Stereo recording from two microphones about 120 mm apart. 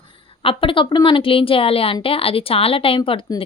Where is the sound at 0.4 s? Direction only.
45° left (ahead or behind).